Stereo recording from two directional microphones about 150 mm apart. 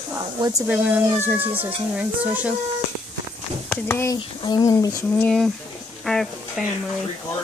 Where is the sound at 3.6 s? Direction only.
10° left (ahead or behind).